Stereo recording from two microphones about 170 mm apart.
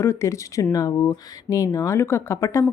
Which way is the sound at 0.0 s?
15° left (ahead or behind).